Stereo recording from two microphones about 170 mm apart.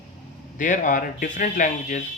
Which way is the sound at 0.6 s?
50° left (ahead or behind).